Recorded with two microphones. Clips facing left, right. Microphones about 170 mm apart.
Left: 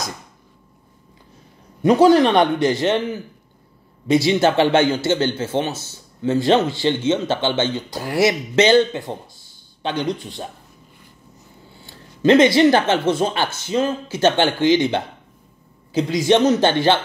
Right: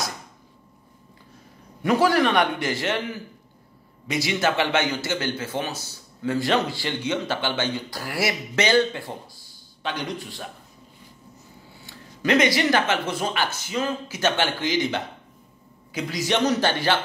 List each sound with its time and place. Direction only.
1.8 s a man's voice: 20° left (ahead or behind)
11.8 s a man's voice: 25° left (ahead or behind)